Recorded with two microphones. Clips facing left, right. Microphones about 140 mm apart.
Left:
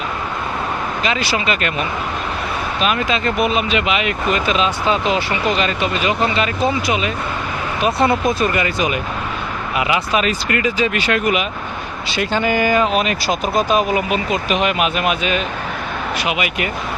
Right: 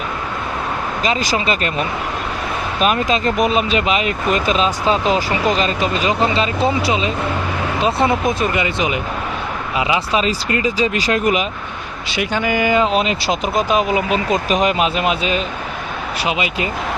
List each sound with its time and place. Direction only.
1.0 s speech: 40° right (ahead or behind)
2.8 s speech: 40° right (ahead or behind)
12.1 s speech: 15° right (ahead or behind)
12.7 s speech: 25° right (ahead or behind)
14.5 s speech: 35° right (ahead or behind)